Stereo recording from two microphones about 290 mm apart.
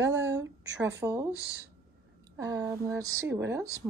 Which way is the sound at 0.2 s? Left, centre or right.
Right.